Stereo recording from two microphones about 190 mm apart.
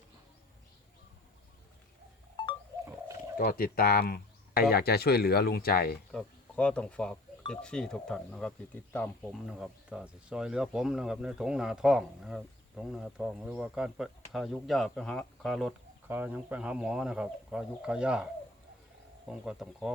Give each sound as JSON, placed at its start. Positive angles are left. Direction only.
{"t": 2.4, "sound": "a sound", "side_deg": 25}
{"t": 3.3, "sound": "speech", "side_deg": 50}
{"t": 6.1, "sound": "speech", "side_deg": 5}
{"t": 9.5, "sound": "speech", "side_deg": -5}
{"t": 16.0, "sound": "speech", "side_deg": -10}
{"t": 19.3, "sound": "speech", "side_deg": -5}